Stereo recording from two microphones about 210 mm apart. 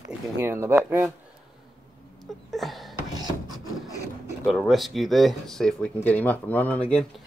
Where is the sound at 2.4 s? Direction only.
Centre (ahead or behind).